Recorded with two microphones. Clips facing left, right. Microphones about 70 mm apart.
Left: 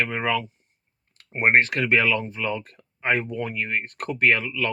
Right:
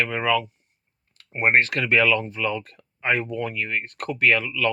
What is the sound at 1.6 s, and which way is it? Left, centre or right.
Speech, left.